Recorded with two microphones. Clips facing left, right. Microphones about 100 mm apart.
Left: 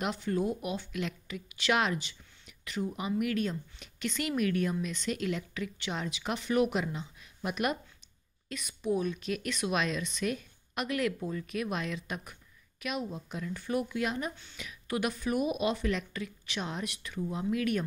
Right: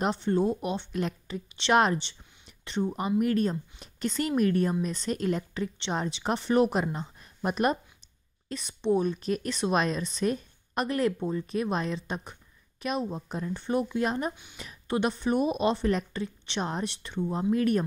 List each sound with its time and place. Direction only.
0.0 s a woman's voice: 30° right (ahead or behind)
14.3 s a woman's voice: 15° right (ahead or behind)
14.6 s a woman's voice: 30° right (ahead or behind)